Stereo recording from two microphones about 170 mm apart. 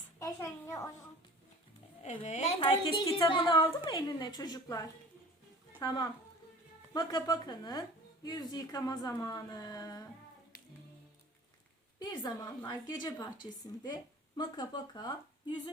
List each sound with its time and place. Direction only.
0.2 s a sound: 20° left (ahead or behind)
2.0 s a woman's voice: 45° left (ahead or behind); by 10.1 s 20° left (ahead or behind)
11.9 s a woman's voice: 25° left (ahead or behind)